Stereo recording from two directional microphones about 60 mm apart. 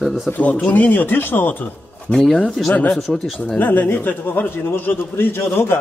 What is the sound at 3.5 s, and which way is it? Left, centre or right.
A man's voice, left.